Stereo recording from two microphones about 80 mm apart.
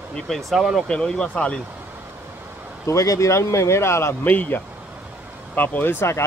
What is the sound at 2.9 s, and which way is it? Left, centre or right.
Speech, left.